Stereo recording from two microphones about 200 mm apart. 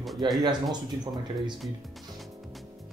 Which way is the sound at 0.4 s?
20° right (ahead or behind).